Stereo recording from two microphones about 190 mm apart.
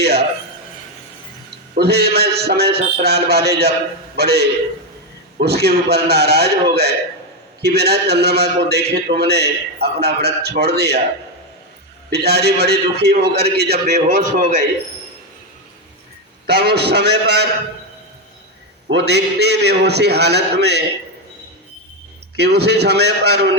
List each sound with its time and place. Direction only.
1.7 s a man's voice: 60° right (ahead or behind)
12.1 s a man's voice: 60° right (ahead or behind)
14.1 s a man's voice: 45° right (ahead or behind)
16.5 s a man's voice: 60° right (ahead or behind)
18.9 s a man's voice: 65° right (ahead or behind)
22.4 s a man's voice: 60° right (ahead or behind)